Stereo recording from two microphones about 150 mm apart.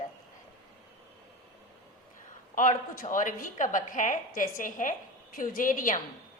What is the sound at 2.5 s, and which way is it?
A woman's voice, 60° left (ahead or behind).